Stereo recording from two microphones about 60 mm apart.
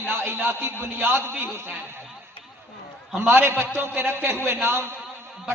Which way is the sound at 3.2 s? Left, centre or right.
Right.